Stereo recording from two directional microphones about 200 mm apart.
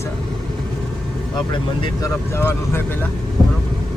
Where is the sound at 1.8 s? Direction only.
15° left (ahead or behind).